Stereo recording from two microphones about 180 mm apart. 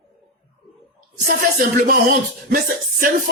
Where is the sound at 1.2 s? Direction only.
50° right (ahead or behind).